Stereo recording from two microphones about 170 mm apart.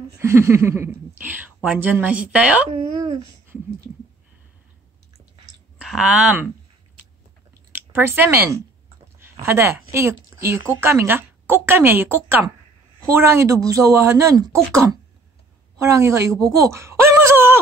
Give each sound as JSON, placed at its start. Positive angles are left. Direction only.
{"t": 0.2, "sound": "a woman's voice", "side_deg": -15}
{"t": 5.8, "sound": "speech", "side_deg": -5}
{"t": 7.7, "sound": "a woman's voice", "side_deg": -15}